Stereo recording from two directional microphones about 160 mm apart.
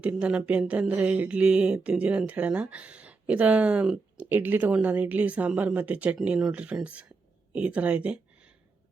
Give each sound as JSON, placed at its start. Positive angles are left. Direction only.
{"t": 0.0, "sound": "speech", "side_deg": -10}